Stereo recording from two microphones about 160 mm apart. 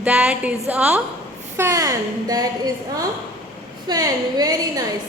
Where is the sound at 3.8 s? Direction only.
25° right (ahead or behind).